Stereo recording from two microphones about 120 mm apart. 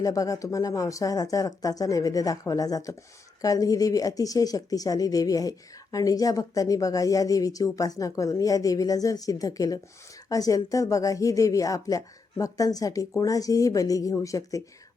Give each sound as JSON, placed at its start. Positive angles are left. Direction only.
{"t": 0.0, "sound": "speech", "side_deg": 30}